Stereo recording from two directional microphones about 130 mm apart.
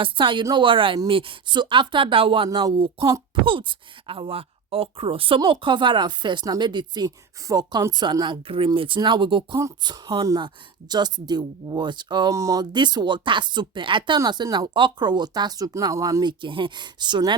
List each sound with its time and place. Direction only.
0.0 s speech: 40° right (ahead or behind)
2.5 s speech: 30° right (ahead or behind)
2.7 s speech: 45° right (ahead or behind)